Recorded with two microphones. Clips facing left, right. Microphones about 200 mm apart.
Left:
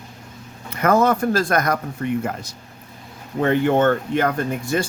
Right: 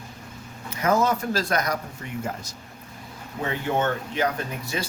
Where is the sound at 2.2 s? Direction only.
65° left (ahead or behind).